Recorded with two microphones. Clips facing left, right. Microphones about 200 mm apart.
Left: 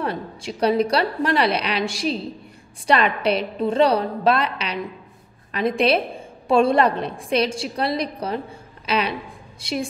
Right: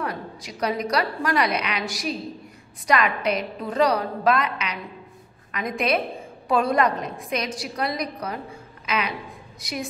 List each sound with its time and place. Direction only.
0.0 s a woman's voice: 30° left (ahead or behind)